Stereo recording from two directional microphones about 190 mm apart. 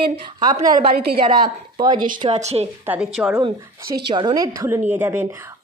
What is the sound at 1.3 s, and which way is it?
Speech, 25° right (ahead or behind).